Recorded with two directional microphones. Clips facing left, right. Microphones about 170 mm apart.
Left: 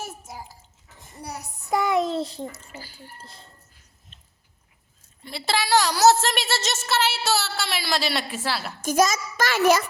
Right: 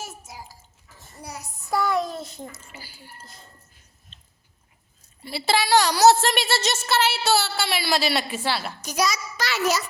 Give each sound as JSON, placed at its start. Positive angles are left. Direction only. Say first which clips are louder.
{"t": 0.2, "sound": "a child's voice", "louder": "left 2 dB", "side_deg": 55}
{"t": 1.2, "sound": "child singing", "louder": "left 2 dB", "side_deg": 60}
{"t": 1.7, "sound": "a child's voice", "louder": "left 2 dB", "side_deg": 20}
{"t": 2.7, "sound": "speech", "louder": "left 3 dB", "side_deg": -10}
{"t": 3.2, "sound": "a child's voice", "louder": "left 1 dB", "side_deg": 30}
{"t": 5.2, "sound": "a woman's voice", "louder": "right 3 dB", "side_deg": -5}
{"t": 8.8, "sound": "a child's voice", "louder": "left 8 dB", "side_deg": 50}